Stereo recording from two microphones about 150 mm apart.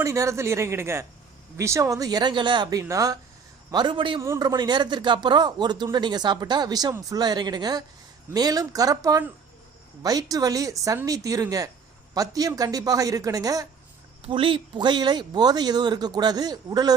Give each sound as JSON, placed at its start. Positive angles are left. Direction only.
{"t": 0.0, "sound": "a man's voice", "side_deg": -20}
{"t": 4.2, "sound": "speech", "side_deg": -20}
{"t": 14.2, "sound": "speech", "side_deg": -35}